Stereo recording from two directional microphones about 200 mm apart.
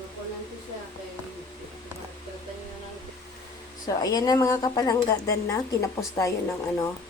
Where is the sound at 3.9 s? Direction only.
20° left (ahead or behind).